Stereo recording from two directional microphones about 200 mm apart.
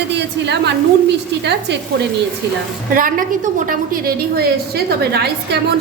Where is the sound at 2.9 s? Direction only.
45° right (ahead or behind).